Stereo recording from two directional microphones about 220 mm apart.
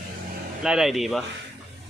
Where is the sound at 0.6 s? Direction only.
Centre (ahead or behind).